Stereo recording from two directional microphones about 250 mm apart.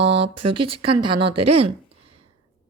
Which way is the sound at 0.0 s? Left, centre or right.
Right.